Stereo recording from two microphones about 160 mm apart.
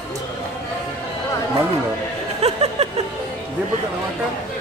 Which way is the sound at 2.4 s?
40° right (ahead or behind).